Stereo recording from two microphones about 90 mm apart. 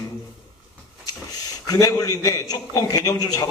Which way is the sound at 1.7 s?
40° left (ahead or behind).